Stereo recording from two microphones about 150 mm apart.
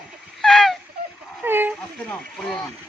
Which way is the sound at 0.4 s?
Centre (ahead or behind).